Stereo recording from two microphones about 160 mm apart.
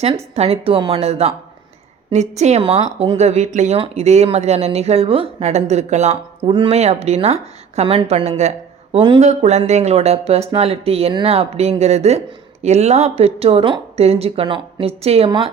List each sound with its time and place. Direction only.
0.3 s speech: 40° right (ahead or behind)
6.5 s speech: 30° right (ahead or behind)
6.7 s speech: 45° right (ahead or behind)
9.3 s speech: 45° right (ahead or behind)